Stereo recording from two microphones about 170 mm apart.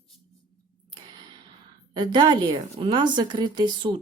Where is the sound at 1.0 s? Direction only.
25° right (ahead or behind).